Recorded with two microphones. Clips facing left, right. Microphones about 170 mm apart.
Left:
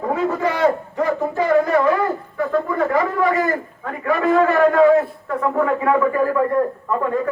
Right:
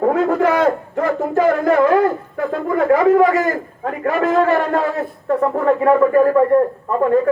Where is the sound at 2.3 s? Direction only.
55° right (ahead or behind).